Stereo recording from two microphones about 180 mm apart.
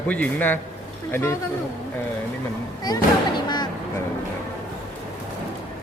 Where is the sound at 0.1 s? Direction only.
10° left (ahead or behind).